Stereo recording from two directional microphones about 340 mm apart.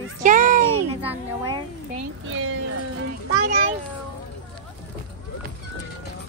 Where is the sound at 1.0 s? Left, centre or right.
Centre.